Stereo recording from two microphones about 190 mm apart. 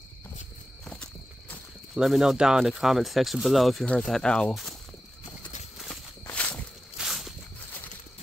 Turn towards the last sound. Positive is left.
turn(degrees=0)  # may be behind; listen again after turning